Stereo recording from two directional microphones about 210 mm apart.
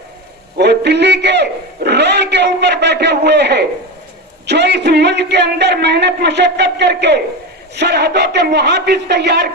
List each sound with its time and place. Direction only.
0.6 s a man's voice: 55° right (ahead or behind)